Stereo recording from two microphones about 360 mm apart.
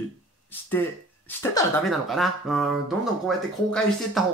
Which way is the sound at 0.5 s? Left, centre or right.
Centre.